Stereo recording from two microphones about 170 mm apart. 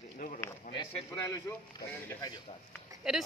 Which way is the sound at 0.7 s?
25° left (ahead or behind).